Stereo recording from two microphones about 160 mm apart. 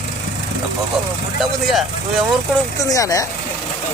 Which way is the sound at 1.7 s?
Centre (ahead or behind).